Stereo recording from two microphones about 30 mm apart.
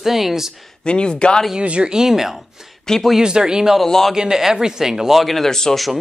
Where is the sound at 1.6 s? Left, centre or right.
Right.